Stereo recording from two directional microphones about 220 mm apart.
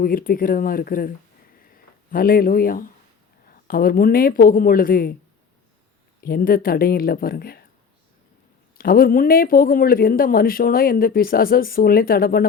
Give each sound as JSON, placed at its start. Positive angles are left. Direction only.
{"t": 0.0, "sound": "speech", "side_deg": 40}
{"t": 2.1, "sound": "speech", "side_deg": 40}
{"t": 6.2, "sound": "speech", "side_deg": 40}
{"t": 8.8, "sound": "speech", "side_deg": 40}